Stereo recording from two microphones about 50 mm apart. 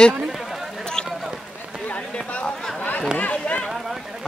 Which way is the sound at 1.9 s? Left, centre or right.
Left.